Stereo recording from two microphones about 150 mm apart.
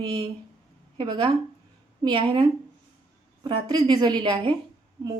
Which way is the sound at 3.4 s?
30° right (ahead or behind).